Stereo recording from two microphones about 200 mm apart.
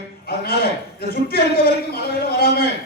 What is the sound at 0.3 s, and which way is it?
A man's voice, 50° left (ahead or behind).